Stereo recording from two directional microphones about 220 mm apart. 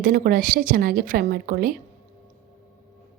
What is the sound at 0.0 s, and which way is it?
A woman's voice, 40° right (ahead or behind).